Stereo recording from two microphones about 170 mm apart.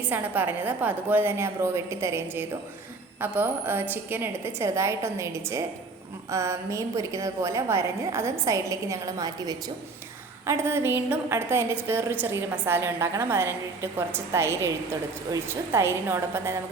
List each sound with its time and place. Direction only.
0.0 s a woman's voice: 10° right (ahead or behind)